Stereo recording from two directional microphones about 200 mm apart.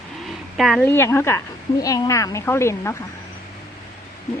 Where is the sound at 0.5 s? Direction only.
Centre (ahead or behind).